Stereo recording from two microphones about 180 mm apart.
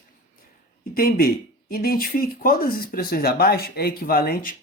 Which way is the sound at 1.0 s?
55° left (ahead or behind).